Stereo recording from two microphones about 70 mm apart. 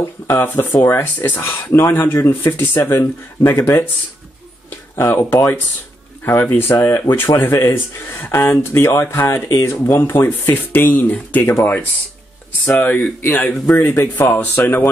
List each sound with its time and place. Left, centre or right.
0.3 s speech: left
4.6 s a sound: left
6.2 s speech: left
9.3 s speech: left
9.7 s speech: left
13.8 s speech: left